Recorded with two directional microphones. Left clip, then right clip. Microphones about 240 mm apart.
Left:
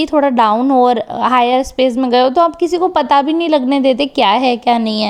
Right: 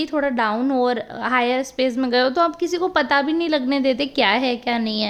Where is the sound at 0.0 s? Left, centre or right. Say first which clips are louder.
Left 9 dB; left.